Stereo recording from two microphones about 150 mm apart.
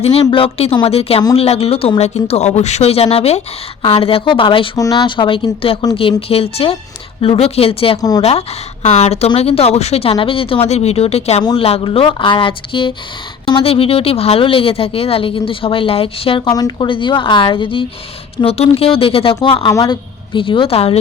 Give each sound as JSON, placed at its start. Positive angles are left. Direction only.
{"t": 0.0, "sound": "speech", "side_deg": 40}